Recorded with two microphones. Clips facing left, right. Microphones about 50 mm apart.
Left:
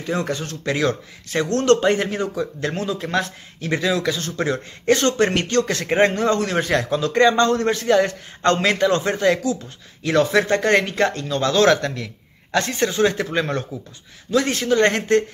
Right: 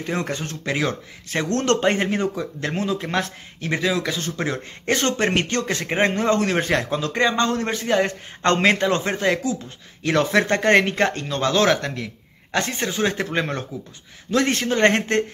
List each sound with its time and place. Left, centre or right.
0.0 s a man's voice: right
13.2 s a man's voice: right